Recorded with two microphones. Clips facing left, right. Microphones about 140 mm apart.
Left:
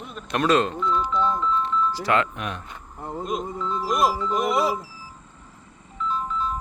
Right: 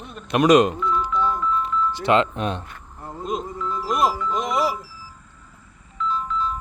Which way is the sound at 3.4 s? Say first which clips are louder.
Even; 25° left (ahead or behind).